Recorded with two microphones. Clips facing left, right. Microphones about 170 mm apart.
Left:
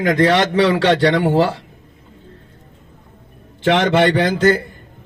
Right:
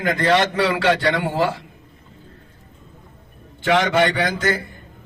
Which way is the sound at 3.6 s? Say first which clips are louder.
Left 3 dB; 35° left (ahead or behind).